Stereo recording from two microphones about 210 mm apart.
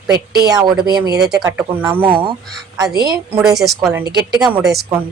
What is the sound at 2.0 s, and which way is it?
A woman's voice, 25° right (ahead or behind).